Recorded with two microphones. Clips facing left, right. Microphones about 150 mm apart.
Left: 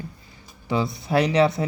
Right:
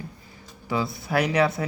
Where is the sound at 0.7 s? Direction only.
20° left (ahead or behind).